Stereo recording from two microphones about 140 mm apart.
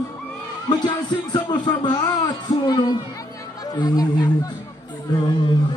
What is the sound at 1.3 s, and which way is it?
A man's voice, 30° left (ahead or behind).